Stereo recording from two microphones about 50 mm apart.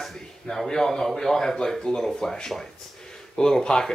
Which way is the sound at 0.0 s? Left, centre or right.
Centre.